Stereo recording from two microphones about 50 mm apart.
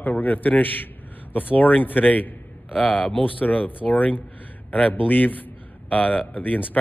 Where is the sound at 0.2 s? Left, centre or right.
Left.